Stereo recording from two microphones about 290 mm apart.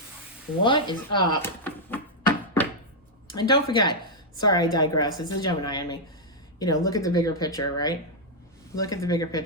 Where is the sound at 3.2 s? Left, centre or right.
Centre.